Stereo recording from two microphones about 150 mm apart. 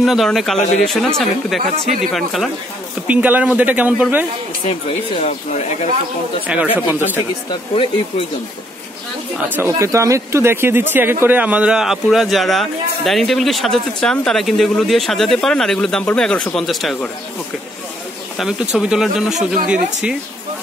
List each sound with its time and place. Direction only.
0.0 s speech: centre (ahead or behind)
3.1 s a man's voice: 10° right (ahead or behind)
5.2 s speech: 45° left (ahead or behind)
6.4 s a man's voice: 10° right (ahead or behind)
9.4 s speech: 20° right (ahead or behind); by 17.1 s centre (ahead or behind)
18.4 s speech: centre (ahead or behind)